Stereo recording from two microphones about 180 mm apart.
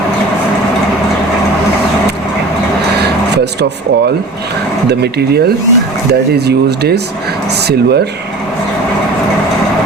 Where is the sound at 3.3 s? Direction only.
70° right (ahead or behind).